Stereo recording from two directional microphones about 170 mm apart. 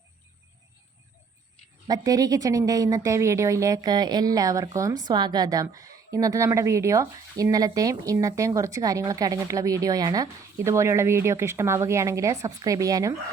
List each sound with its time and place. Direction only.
1.9 s speech: 20° right (ahead or behind)